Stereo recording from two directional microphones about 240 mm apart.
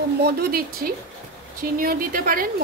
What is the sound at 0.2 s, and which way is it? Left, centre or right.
Speech, right.